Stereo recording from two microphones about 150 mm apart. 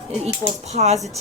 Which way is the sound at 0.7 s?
45° right (ahead or behind).